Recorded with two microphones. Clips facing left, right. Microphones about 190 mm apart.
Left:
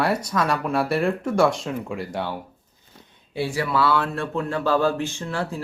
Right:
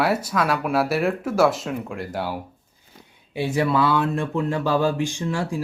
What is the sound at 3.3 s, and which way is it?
Speech, 20° right (ahead or behind).